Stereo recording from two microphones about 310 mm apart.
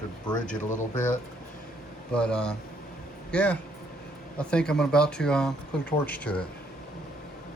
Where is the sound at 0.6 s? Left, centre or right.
Left.